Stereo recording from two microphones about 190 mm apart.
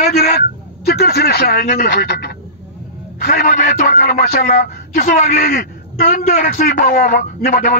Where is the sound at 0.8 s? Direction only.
55° left (ahead or behind).